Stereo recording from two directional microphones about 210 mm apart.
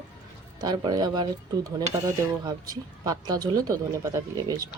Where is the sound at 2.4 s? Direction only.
15° right (ahead or behind).